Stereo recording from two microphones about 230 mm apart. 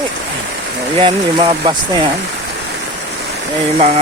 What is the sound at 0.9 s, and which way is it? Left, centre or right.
Speech, right.